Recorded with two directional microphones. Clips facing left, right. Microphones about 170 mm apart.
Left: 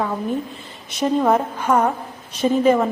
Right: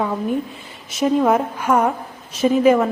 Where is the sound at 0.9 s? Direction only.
5° right (ahead or behind).